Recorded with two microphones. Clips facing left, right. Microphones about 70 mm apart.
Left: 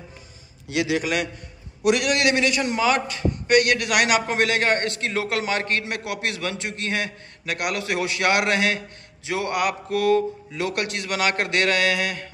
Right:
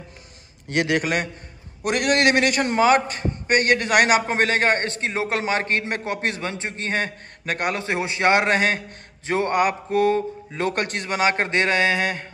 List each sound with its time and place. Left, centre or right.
0.7 s a man's voice: right